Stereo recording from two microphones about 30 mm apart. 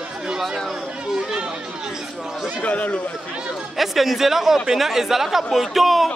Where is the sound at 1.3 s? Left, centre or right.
Right.